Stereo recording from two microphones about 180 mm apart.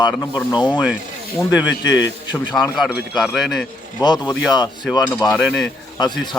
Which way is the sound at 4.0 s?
25° left (ahead or behind).